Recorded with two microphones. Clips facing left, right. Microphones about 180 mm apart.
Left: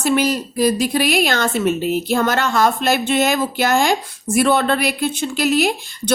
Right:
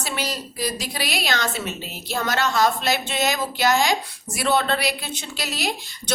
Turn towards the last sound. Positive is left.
turn(degrees=55)  # may be behind; listen again after turning